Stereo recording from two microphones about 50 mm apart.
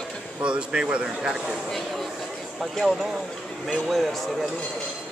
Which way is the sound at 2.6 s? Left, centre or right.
Centre.